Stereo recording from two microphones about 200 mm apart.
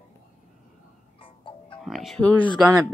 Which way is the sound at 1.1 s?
25° left (ahead or behind).